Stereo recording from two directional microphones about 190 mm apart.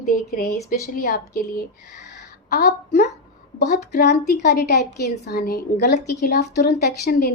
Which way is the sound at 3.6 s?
60° left (ahead or behind).